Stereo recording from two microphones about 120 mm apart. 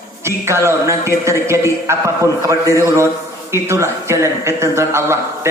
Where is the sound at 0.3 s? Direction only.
20° right (ahead or behind).